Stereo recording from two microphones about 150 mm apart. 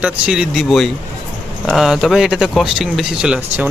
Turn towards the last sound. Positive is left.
turn(degrees=-10)  # may be behind; listen again after turning